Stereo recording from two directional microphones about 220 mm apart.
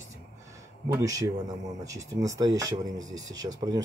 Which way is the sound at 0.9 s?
15° right (ahead or behind).